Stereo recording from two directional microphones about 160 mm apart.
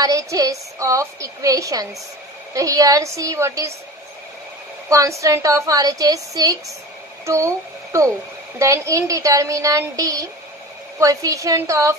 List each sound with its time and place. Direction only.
0.0 s a woman's voice: 20° right (ahead or behind)
4.8 s a woman's voice: 20° right (ahead or behind)